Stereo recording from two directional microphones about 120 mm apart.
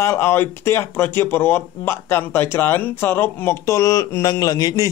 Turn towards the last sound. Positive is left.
turn(degrees=30)  # may be behind; listen again after turning